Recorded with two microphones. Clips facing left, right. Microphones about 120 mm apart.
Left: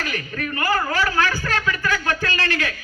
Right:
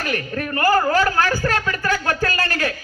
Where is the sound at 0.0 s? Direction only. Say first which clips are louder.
Right 3 dB; 40° right (ahead or behind).